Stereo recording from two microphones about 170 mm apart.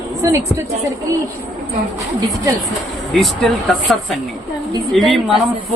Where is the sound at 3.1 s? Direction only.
Centre (ahead or behind).